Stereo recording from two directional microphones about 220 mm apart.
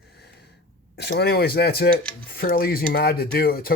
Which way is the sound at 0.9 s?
50° left (ahead or behind).